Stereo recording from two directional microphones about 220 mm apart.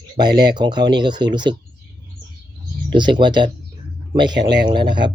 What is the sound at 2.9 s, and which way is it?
Speech, 20° right (ahead or behind).